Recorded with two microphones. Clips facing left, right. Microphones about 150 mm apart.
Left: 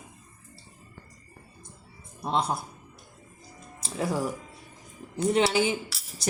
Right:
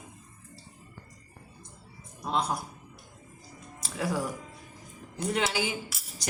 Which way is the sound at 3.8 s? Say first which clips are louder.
Left 2 dB; 25° left (ahead or behind).